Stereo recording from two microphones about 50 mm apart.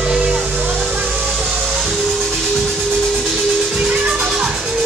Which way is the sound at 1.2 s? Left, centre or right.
Centre.